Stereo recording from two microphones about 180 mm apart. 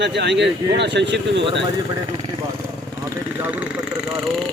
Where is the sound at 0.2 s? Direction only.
70° right (ahead or behind).